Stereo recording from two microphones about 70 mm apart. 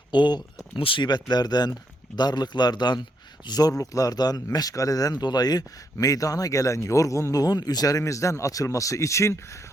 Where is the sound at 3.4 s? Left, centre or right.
Left.